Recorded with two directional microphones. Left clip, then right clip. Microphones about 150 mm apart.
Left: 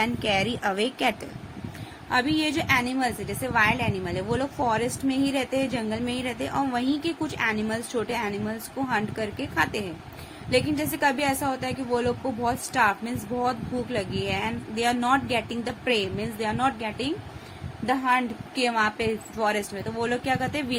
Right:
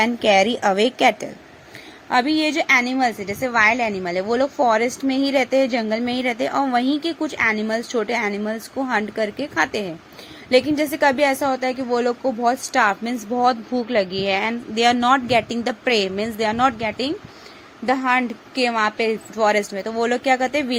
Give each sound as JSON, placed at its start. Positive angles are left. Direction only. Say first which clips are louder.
{"t": 0.0, "sound": "a woman's voice", "louder": "right 9 dB", "side_deg": -55}